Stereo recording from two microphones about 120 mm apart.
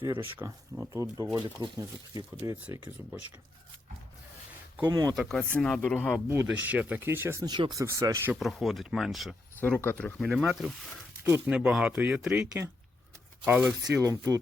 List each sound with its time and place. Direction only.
0.2 s speech: 15° right (ahead or behind)
1.6 s speech: 40° right (ahead or behind)
2.4 s speech: 25° right (ahead or behind)
3.0 s speech: 15° right (ahead or behind)
4.8 s speech: 35° right (ahead or behind)
5.0 s speech: centre (ahead or behind)
6.2 s speech: 20° right (ahead or behind)
7.4 s speech: 40° right (ahead or behind)
7.8 s speech: 30° right (ahead or behind)
8.4 s speech: centre (ahead or behind)
9.6 s speech: 15° left (ahead or behind)
10.2 s speech: centre (ahead or behind)
13.4 s speech: 15° right (ahead or behind)
13.9 s speech: 30° right (ahead or behind)